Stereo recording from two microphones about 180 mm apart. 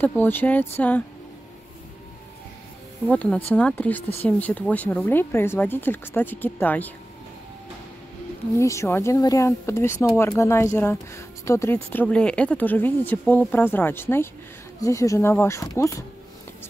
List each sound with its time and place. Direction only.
0.0 s speech: 10° left (ahead or behind)
3.1 s speech: 10° left (ahead or behind)
8.5 s speech: 15° left (ahead or behind)